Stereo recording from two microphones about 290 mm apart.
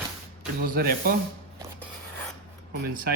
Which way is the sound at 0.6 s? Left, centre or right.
Right.